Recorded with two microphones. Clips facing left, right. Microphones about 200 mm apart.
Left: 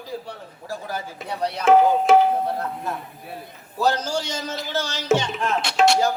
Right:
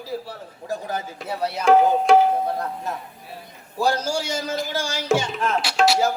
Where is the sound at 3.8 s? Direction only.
10° right (ahead or behind).